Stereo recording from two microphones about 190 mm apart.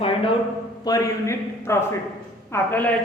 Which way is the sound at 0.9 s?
15° left (ahead or behind).